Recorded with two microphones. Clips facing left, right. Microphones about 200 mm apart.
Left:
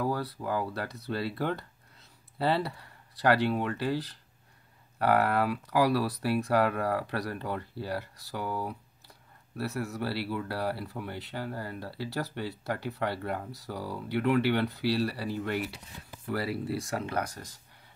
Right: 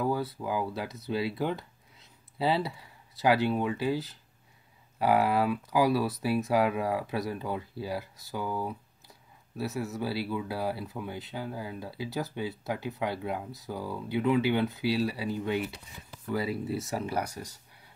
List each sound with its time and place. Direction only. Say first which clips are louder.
0.0 s speech: right 1 dB; centre (ahead or behind)
9.6 s speech: right 1 dB; centre (ahead or behind)
13.7 s speech: right 1 dB; 25° right (ahead or behind)
13.9 s speech: even; centre (ahead or behind)